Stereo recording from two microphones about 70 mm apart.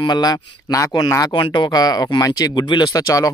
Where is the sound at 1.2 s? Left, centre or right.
Left.